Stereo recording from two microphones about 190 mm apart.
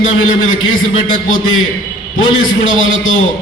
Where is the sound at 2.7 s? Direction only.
90° left.